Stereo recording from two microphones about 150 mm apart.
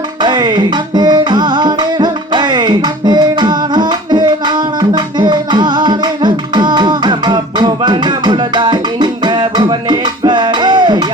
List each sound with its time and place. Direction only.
0.2 s music: 30° right (ahead or behind)